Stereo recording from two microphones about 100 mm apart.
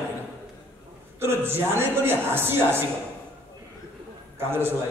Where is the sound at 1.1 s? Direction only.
20° right (ahead or behind).